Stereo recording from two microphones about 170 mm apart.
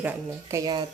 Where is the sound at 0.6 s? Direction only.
25° right (ahead or behind).